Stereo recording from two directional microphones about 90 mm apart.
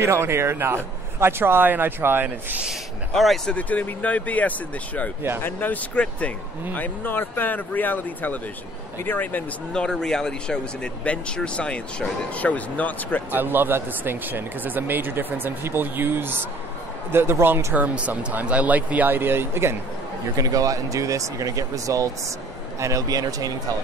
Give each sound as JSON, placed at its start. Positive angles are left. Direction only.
{"t": 0.0, "sound": "speech", "side_deg": -30}
{"t": 3.1, "sound": "speech", "side_deg": 5}
{"t": 3.5, "sound": "speech", "side_deg": 20}
{"t": 9.7, "sound": "speech", "side_deg": 5}
{"t": 13.3, "sound": "speech", "side_deg": -20}
{"t": 17.7, "sound": "speech", "side_deg": -15}
{"t": 20.3, "sound": "speech", "side_deg": -40}